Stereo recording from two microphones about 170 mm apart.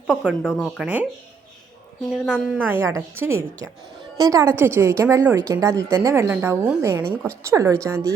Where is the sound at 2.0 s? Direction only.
5° right (ahead or behind).